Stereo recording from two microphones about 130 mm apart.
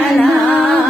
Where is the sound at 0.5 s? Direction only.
10° left (ahead or behind).